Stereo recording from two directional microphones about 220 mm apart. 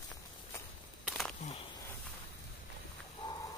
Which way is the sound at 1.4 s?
25° left (ahead or behind).